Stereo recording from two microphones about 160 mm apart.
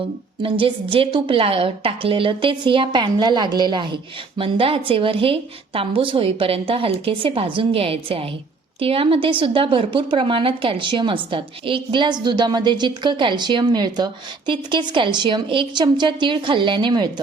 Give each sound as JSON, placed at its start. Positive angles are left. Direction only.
{"t": 0.4, "sound": "a woman's voice", "side_deg": -35}